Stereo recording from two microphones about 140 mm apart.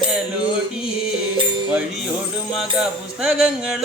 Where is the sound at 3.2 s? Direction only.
5° right (ahead or behind).